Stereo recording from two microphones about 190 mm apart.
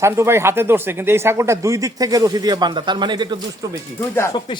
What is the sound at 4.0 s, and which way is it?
Speech, 15° left (ahead or behind).